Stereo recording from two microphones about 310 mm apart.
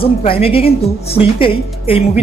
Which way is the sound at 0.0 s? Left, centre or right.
Centre.